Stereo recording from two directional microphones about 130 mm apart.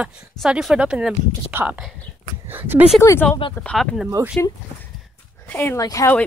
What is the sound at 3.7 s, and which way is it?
Speech, centre (ahead or behind).